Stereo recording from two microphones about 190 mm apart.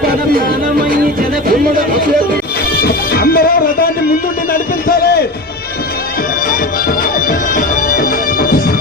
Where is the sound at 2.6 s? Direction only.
55° left (ahead or behind).